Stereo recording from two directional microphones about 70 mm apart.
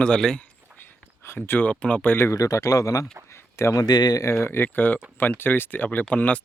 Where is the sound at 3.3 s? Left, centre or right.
Left.